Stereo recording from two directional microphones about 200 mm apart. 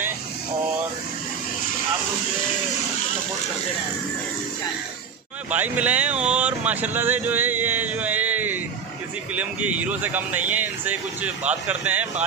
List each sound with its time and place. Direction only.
5.5 s speech: 5° right (ahead or behind)